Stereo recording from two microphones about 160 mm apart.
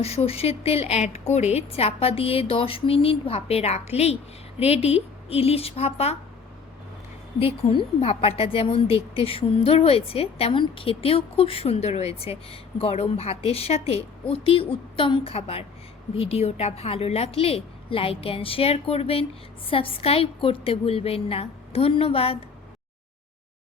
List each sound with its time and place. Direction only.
0.0 s speech: 40° left (ahead or behind)
7.7 s speech: 35° left (ahead or behind)